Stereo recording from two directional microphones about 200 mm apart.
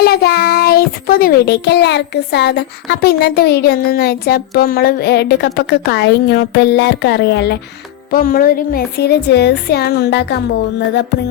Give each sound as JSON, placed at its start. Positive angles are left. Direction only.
{"t": 0.0, "sound": "a child's voice", "side_deg": 50}
{"t": 8.1, "sound": "a child's voice", "side_deg": 45}